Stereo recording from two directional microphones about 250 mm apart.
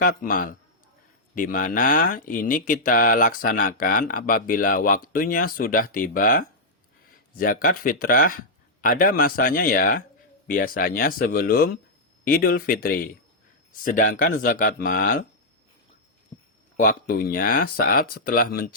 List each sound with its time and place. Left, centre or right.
0.0 s speech: left
16.7 s speech: left